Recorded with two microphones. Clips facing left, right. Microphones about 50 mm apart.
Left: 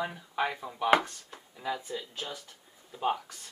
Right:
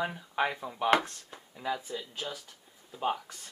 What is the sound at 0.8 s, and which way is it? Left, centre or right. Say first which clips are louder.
Speech: left 1 dB; centre.